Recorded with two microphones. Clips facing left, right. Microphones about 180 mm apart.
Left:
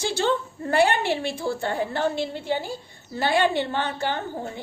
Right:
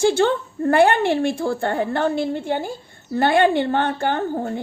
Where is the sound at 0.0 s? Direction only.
55° right (ahead or behind).